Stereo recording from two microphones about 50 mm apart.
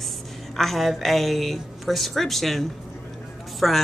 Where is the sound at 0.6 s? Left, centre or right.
Centre.